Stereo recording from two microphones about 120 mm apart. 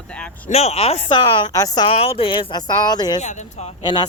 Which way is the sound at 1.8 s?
50° left (ahead or behind).